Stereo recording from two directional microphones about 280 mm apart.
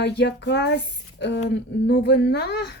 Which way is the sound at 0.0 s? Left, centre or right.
Left.